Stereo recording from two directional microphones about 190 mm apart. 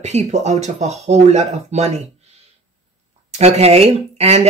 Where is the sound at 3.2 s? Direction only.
35° right (ahead or behind).